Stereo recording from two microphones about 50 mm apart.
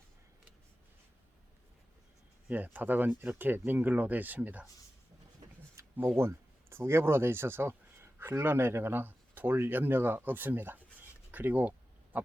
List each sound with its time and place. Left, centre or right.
2.7 s speech: right
5.8 s a sound: right
6.1 s speech: right
12.1 s owl: right